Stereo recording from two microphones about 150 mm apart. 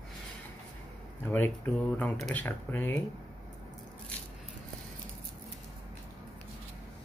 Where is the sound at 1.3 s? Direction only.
10° left (ahead or behind).